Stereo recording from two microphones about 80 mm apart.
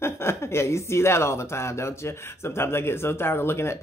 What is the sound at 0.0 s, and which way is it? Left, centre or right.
A woman's voice, left.